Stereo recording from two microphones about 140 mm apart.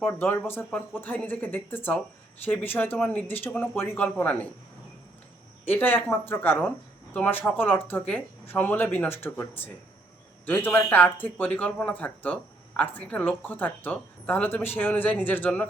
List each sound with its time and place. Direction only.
0.0 s speech: 15° left (ahead or behind)
5.6 s speech: 15° left (ahead or behind)